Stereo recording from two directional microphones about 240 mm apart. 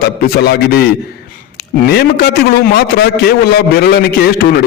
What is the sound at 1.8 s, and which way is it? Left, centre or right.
A man's voice, left.